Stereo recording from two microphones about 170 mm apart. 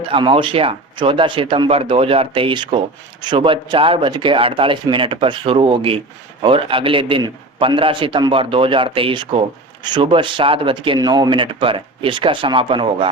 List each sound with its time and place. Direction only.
0.1 s a man's voice: 30° right (ahead or behind)